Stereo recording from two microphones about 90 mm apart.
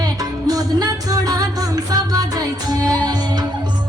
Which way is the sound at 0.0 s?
45° right (ahead or behind).